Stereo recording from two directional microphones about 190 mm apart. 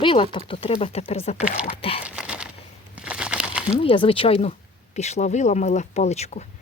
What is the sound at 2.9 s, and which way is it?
Crumpling, 5° right (ahead or behind).